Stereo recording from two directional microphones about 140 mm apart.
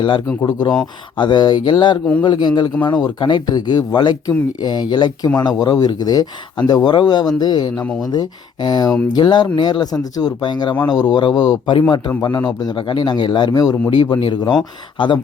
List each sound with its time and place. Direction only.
0.3 s speech: 30° left (ahead or behind)
7.8 s speech: 5° left (ahead or behind)
8.1 s speech: 30° left (ahead or behind)